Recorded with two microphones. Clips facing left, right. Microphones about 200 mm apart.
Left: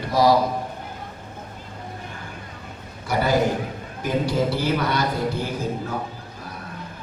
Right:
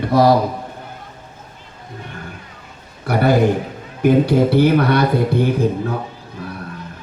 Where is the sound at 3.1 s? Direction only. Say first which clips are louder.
Right 6 dB; 60° right (ahead or behind).